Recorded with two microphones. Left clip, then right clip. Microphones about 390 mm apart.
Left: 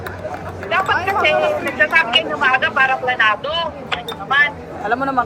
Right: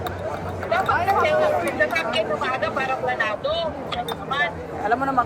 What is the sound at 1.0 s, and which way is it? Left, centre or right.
Speech, centre.